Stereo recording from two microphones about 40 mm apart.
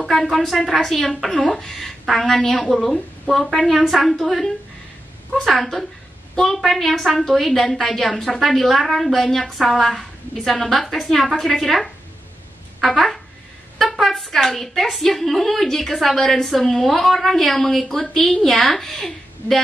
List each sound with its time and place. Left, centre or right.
0.1 s a woman's voice: centre
9.8 s a woman's voice: left
10.4 s a woman's voice: centre
12.9 s a woman's voice: centre